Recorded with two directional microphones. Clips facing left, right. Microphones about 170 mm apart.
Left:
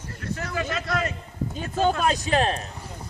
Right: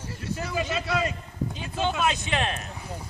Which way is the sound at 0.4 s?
10° right (ahead or behind).